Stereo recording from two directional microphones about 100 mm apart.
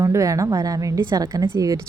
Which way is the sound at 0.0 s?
30° right (ahead or behind).